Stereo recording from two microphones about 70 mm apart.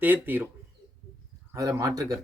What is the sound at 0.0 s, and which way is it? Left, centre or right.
Speech, right.